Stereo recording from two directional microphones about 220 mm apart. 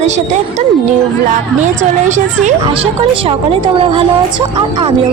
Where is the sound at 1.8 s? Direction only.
35° right (ahead or behind).